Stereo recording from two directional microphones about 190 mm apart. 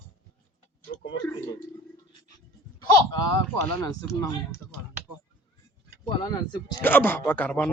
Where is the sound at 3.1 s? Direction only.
20° left (ahead or behind).